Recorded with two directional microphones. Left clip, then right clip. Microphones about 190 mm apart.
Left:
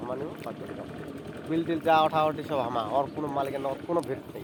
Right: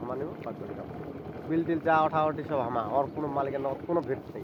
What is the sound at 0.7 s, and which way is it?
Speech, 30° left (ahead or behind).